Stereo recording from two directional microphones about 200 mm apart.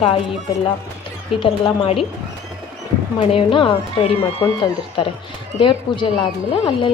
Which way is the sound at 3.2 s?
30° left (ahead or behind).